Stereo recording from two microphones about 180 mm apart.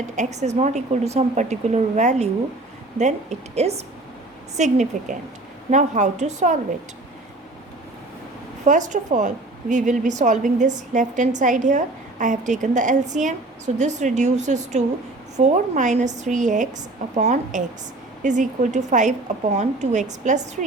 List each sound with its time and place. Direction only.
0.2 s a woman's voice: 40° right (ahead or behind)
8.6 s a woman's voice: 45° right (ahead or behind)